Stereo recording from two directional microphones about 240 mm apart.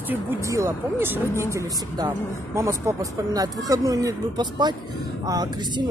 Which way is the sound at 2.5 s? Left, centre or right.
Centre.